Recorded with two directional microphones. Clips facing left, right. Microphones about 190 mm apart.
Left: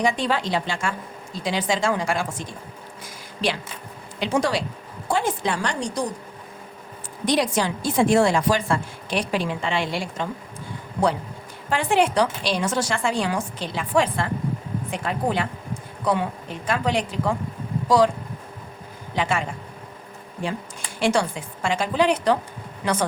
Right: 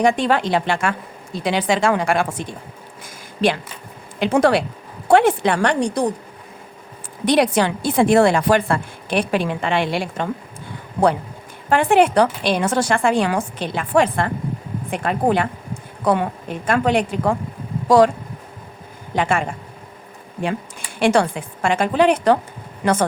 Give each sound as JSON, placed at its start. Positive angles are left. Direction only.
{"t": 0.0, "sound": "a woman's voice", "side_deg": -55}
{"t": 7.3, "sound": "a woman's voice", "side_deg": -60}
{"t": 11.7, "sound": "a woman's voice", "side_deg": -55}
{"t": 19.1, "sound": "a woman's voice", "side_deg": -50}
{"t": 21.0, "sound": "a woman's voice", "side_deg": -55}